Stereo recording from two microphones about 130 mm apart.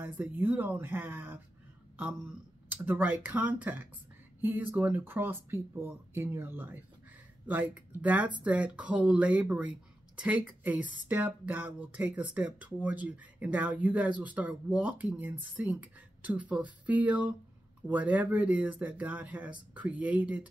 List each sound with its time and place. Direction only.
0.0 s speech: 15° right (ahead or behind)
2.7 s speech: 15° right (ahead or behind)